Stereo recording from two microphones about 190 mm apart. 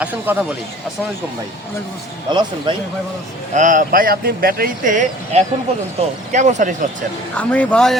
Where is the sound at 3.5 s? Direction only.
40° right (ahead or behind).